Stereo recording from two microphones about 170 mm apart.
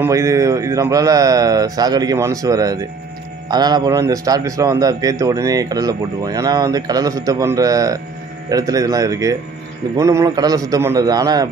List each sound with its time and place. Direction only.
0.0 s a man's voice: 15° right (ahead or behind)